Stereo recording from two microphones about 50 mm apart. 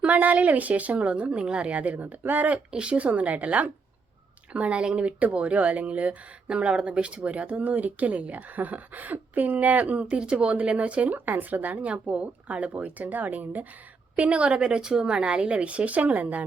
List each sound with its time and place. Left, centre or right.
0.0 s speech: right
2.7 s speech: right